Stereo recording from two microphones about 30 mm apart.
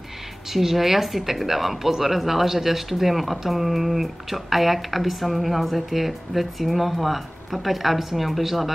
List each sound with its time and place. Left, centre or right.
0.5 s speech: centre